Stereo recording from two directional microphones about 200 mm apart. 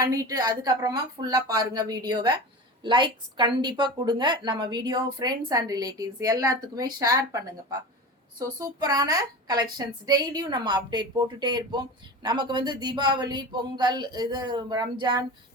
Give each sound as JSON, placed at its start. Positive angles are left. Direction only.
{"t": 0.0, "sound": "a woman's voice", "side_deg": -15}
{"t": 8.4, "sound": "a woman's voice", "side_deg": -20}